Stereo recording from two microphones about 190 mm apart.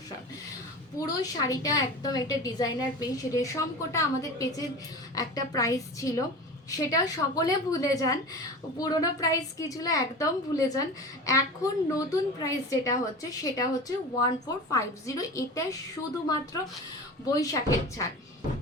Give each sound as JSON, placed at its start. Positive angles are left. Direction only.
{"t": 0.9, "sound": "a woman's voice", "side_deg": 20}
{"t": 17.4, "sound": "a woman's voice", "side_deg": 15}